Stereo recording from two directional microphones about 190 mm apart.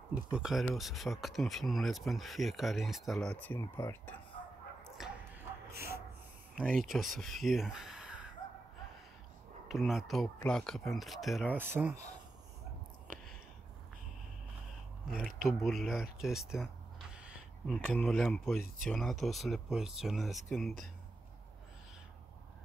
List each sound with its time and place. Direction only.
0.1 s speech: 5° right (ahead or behind)
4.8 s bow-wow: centre (ahead or behind)
5.7 s gasp: 55° right (ahead or behind)
6.5 s speech: centre (ahead or behind)
9.7 s speech: centre (ahead or behind)
15.4 s speech: centre (ahead or behind)